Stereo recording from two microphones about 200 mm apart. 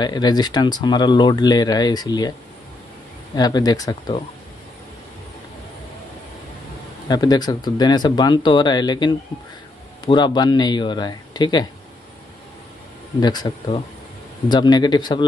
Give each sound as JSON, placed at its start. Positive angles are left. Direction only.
{"t": 0.0, "sound": "speech", "side_deg": 20}
{"t": 3.3, "sound": "speech", "side_deg": 20}
{"t": 7.1, "sound": "speech", "side_deg": 20}
{"t": 13.2, "sound": "speech", "side_deg": 20}